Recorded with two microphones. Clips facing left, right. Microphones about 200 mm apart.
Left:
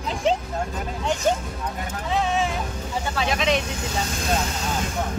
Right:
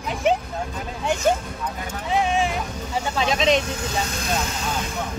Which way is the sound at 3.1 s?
20° right (ahead or behind).